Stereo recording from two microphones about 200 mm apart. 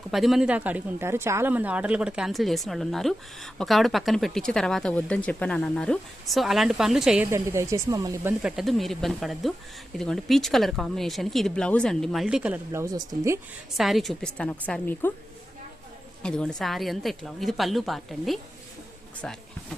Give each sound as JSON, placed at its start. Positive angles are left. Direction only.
{"t": 0.1, "sound": "speech", "side_deg": 0}
{"t": 7.3, "sound": "speech", "side_deg": -15}
{"t": 12.8, "sound": "speech", "side_deg": -20}
{"t": 13.7, "sound": "a woman's voice", "side_deg": 0}
{"t": 16.2, "sound": "speech", "side_deg": 5}